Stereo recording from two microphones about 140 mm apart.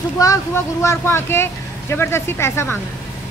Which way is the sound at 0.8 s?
15° left (ahead or behind).